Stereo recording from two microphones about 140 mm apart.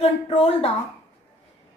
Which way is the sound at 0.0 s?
45° left (ahead or behind).